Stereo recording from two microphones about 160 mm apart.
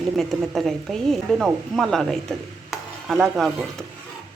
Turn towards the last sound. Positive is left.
turn(degrees=0)  # may be behind; listen again after turning